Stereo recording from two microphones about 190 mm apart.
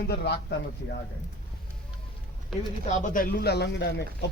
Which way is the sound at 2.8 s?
40° left (ahead or behind).